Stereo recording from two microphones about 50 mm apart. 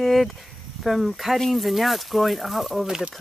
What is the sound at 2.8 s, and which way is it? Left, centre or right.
Speech, centre.